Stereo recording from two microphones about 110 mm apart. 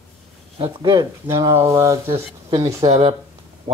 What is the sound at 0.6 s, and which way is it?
Speech, 40° right (ahead or behind).